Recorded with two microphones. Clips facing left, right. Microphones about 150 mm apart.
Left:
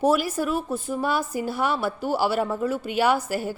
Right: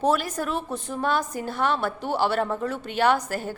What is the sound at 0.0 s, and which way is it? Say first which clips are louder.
A woman's voice: left 2 dB; 10° left (ahead or behind).